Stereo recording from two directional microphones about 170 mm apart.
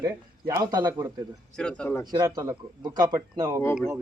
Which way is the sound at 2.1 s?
20° right (ahead or behind).